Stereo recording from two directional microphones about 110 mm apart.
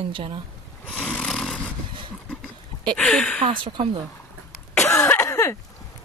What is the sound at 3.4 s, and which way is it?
Speech, 50° right (ahead or behind).